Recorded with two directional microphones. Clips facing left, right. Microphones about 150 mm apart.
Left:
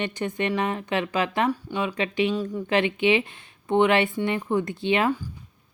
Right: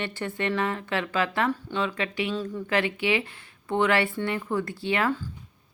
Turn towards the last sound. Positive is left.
turn(degrees=20)  # may be behind; listen again after turning